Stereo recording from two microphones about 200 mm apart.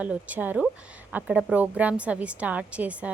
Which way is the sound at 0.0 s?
5° right (ahead or behind).